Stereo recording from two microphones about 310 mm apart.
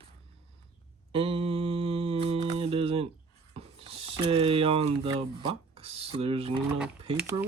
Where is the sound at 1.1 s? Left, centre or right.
Centre.